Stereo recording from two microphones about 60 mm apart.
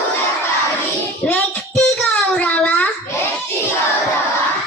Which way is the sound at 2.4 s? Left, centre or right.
Left.